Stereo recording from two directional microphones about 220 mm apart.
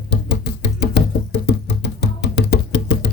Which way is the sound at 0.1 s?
50° left (ahead or behind).